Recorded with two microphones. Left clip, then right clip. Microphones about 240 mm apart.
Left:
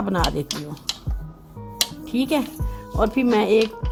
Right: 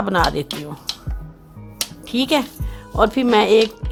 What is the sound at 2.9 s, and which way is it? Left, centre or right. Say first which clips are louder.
Speech: right 5 dB; right.